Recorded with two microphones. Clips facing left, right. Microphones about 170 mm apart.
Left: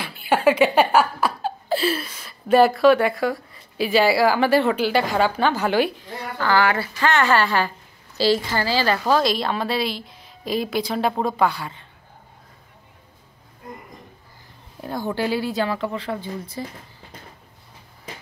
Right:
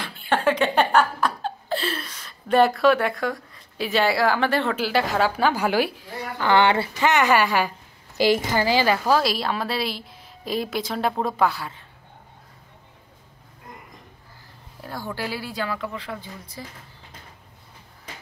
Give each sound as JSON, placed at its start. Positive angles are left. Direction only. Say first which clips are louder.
{"t": 0.0, "sound": "speech", "louder": "left 4 dB", "side_deg": 10}
{"t": 6.4, "sound": "a woman's voice", "louder": "right 1 dB", "side_deg": -25}
{"t": 14.8, "sound": "a sound", "louder": "left 6 dB", "side_deg": 20}
{"t": 15.1, "sound": "speech", "louder": "left 8 dB", "side_deg": 25}